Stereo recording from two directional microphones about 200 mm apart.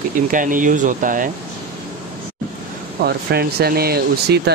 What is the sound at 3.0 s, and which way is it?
Speech, 50° right (ahead or behind).